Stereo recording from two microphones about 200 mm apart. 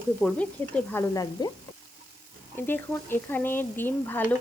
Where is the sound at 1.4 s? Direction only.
20° left (ahead or behind).